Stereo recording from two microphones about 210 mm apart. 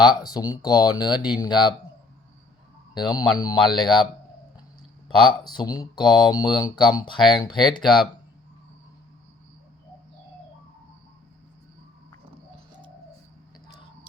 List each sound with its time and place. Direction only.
0.0 s speech: 20° left (ahead or behind)
3.1 s speech: 15° left (ahead or behind)
5.5 s speech: 15° left (ahead or behind)